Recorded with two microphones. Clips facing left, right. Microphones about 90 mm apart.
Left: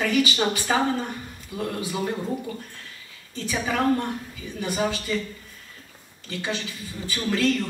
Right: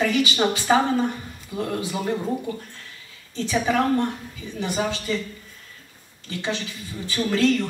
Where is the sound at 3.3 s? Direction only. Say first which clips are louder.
Right 4 dB; 20° right (ahead or behind).